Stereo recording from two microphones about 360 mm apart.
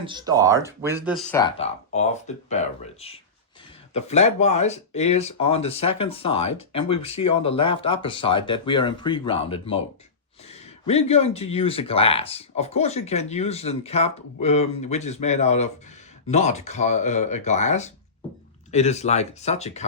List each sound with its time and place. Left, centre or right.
0.0 s speech: centre